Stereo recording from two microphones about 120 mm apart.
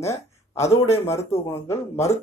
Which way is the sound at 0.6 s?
60° left (ahead or behind).